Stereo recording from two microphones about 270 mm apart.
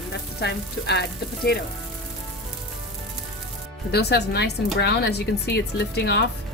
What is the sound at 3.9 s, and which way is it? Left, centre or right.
A woman's voice, left.